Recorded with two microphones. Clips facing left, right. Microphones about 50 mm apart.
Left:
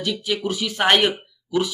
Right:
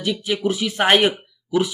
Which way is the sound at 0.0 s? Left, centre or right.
Centre.